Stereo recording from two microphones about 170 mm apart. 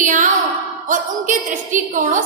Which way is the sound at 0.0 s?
50° right (ahead or behind).